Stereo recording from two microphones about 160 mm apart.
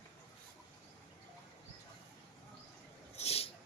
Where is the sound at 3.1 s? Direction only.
40° left (ahead or behind).